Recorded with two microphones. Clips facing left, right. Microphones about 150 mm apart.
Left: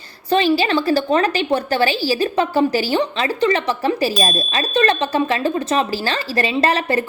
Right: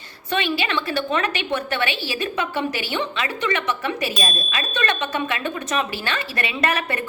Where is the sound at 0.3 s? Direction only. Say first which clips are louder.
Left 8 dB; 35° left (ahead or behind).